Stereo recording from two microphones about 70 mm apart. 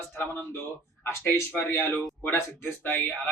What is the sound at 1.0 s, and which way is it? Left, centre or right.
A man's voice, left.